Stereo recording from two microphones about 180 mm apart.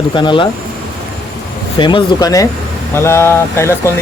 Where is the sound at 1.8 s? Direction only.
25° left (ahead or behind).